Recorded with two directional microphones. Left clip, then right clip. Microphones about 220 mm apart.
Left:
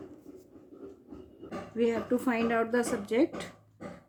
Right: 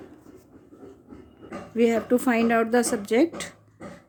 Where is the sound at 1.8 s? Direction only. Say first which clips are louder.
Right 7 dB; 50° right (ahead or behind).